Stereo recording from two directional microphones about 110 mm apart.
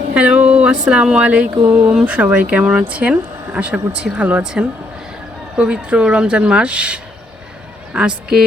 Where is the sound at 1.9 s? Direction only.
10° right (ahead or behind).